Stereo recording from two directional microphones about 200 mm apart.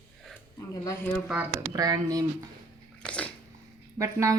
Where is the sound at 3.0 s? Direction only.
5° left (ahead or behind).